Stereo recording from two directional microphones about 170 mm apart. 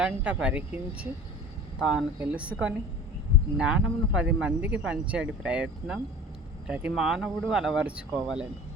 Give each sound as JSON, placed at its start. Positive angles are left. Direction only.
{"t": 0.0, "sound": "speech", "side_deg": -5}
{"t": 6.7, "sound": "speech", "side_deg": -5}